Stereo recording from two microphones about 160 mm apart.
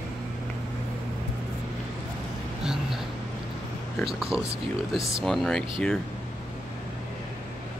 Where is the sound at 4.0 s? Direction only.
Centre (ahead or behind).